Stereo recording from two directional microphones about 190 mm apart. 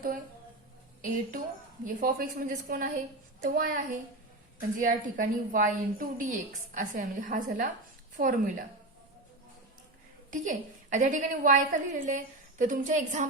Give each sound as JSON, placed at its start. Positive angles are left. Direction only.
{"t": 1.0, "sound": "a woman's voice", "side_deg": -45}
{"t": 10.3, "sound": "a woman's voice", "side_deg": -40}